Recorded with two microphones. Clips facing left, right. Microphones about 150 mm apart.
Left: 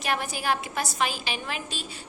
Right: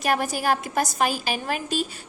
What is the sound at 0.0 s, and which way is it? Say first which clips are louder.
A woman's voice: right 5 dB; 45° right (ahead or behind).